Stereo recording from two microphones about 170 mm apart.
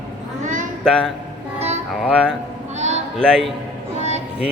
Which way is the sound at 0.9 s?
5° left (ahead or behind).